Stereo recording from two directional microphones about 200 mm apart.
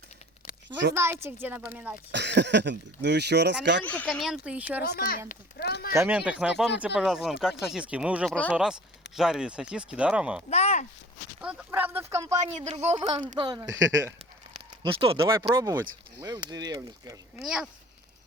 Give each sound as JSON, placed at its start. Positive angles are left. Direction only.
{"t": 0.9, "sound": "speech", "side_deg": -10}
{"t": 2.1, "sound": "speech", "side_deg": -60}
{"t": 3.8, "sound": "speech", "side_deg": 5}
{"t": 4.9, "sound": "speech", "side_deg": 50}
{"t": 5.9, "sound": "speech", "side_deg": -10}
{"t": 10.5, "sound": "a sound", "side_deg": 35}
{"t": 11.3, "sound": "speech", "side_deg": -5}
{"t": 12.4, "sound": "a woman's voice", "side_deg": -35}
{"t": 13.1, "sound": "speech", "side_deg": -20}
{"t": 14.5, "sound": "a sound", "side_deg": -25}
{"t": 15.5, "sound": "speech", "side_deg": -15}
{"t": 17.4, "sound": "speech", "side_deg": 0}